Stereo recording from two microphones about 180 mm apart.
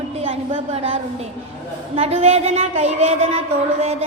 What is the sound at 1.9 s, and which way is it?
A woman's voice, 35° right (ahead or behind).